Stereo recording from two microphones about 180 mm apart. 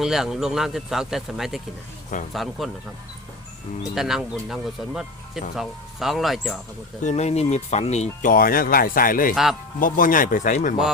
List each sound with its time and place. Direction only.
0.0 s speech: centre (ahead or behind)
3.9 s speech: centre (ahead or behind)
7.0 s speech: 40° left (ahead or behind)
9.3 s speech: centre (ahead or behind)
9.8 s speech: 50° left (ahead or behind)